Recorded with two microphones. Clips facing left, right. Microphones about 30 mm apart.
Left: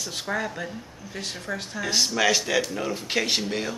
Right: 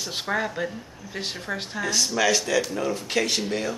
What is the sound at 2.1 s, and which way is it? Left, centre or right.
Speech, centre.